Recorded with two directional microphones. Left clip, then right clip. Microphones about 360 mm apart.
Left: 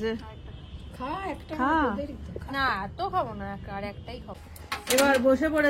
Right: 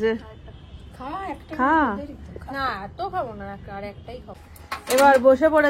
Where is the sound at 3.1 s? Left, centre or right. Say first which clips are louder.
Right 1 dB; centre.